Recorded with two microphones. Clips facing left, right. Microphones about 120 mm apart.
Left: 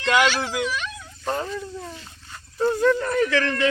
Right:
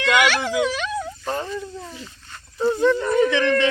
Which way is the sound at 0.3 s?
90° right.